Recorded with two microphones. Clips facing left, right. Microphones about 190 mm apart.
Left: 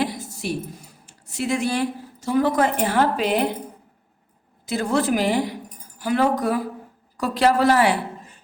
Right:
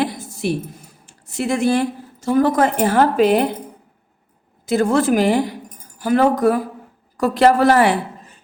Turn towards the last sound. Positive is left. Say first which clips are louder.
# right 4 dB
turn(degrees=-50)  # may be behind; listen again after turning